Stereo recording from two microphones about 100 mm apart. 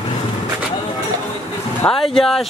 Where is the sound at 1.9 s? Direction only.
5° left (ahead or behind).